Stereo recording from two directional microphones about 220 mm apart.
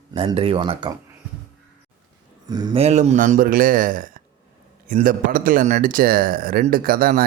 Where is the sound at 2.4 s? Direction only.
20° right (ahead or behind).